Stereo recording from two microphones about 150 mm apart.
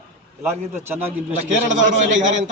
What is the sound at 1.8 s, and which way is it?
Speech, 55° right (ahead or behind).